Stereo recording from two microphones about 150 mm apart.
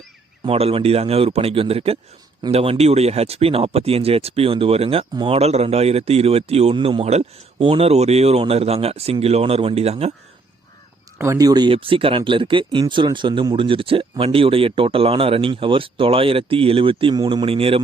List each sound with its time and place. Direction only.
0.4 s speech: 40° right (ahead or behind)
11.2 s speech: 20° right (ahead or behind); by 17.8 s 40° right (ahead or behind)